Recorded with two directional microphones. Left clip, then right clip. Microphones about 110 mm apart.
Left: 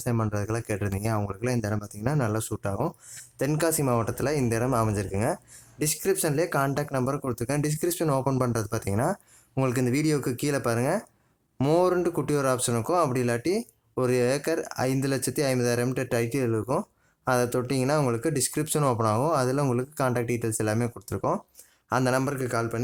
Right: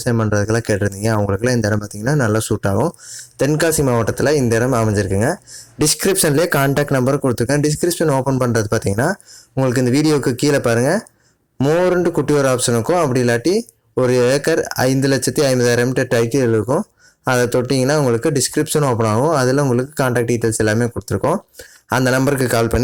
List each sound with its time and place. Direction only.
0.3 s speech: 30° right (ahead or behind)
5.8 s speech: 45° right (ahead or behind)
6.7 s speech: 45° right (ahead or behind)
7.2 s speech: 35° right (ahead or behind)
11.5 s speech: 10° right (ahead or behind)
12.0 s speech: 25° right (ahead or behind)
22.3 s speech: 55° right (ahead or behind)